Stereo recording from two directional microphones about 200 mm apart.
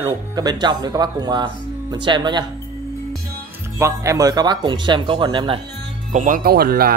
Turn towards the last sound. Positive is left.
turn(degrees=-50)  # may be behind; listen again after turning